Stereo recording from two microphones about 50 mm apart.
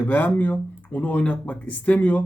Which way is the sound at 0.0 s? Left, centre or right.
Left.